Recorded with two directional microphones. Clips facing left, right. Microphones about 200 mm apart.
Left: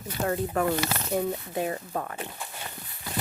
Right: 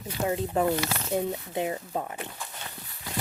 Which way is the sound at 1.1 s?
20° right (ahead or behind).